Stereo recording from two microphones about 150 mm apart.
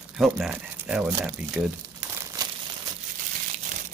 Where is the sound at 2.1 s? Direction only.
25° right (ahead or behind).